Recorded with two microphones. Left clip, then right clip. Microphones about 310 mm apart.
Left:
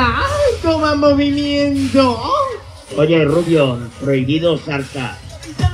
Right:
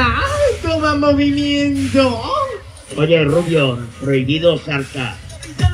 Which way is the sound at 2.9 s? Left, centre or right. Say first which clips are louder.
Left 1 dB; left.